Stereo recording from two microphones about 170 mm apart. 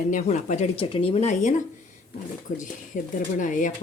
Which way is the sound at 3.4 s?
50° left (ahead or behind).